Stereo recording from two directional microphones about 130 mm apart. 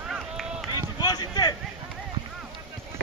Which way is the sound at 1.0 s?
30° left (ahead or behind).